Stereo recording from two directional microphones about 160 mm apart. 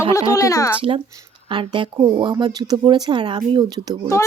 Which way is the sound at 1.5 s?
30° right (ahead or behind).